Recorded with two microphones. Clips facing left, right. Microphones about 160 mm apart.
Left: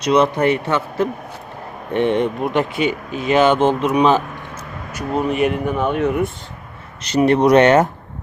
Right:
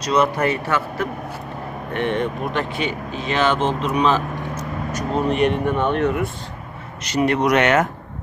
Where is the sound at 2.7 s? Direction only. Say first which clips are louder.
Left 4 dB; 30° right (ahead or behind).